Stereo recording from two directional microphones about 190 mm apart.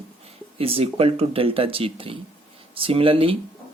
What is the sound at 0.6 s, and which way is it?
Speech, 30° right (ahead or behind).